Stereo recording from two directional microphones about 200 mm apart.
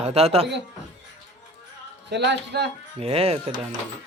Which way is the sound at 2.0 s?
60° right (ahead or behind).